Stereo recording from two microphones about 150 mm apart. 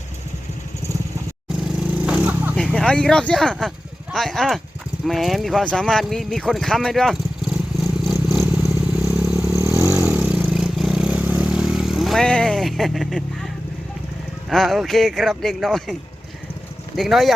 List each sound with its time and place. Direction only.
1.9 s a sound: 5° right (ahead or behind)
2.7 s speech: 5° left (ahead or behind)
8.3 s vehicle: centre (ahead or behind)
9.6 s vehicle: 20° right (ahead or behind)
9.8 s vehicle: 5° right (ahead or behind)
14.5 s speech: centre (ahead or behind)